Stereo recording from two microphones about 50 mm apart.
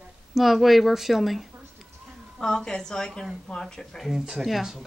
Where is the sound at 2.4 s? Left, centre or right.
Centre.